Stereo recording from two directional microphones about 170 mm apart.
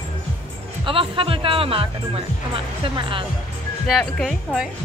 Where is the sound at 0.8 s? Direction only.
30° right (ahead or behind).